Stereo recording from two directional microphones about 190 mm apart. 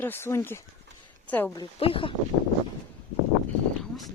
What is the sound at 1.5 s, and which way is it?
Speech, 30° left (ahead or behind).